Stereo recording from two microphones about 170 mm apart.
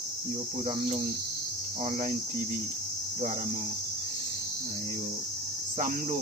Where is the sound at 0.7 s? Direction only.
35° right (ahead or behind).